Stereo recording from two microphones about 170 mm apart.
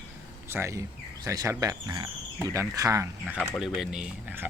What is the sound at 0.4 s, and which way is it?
A man's voice, 15° right (ahead or behind).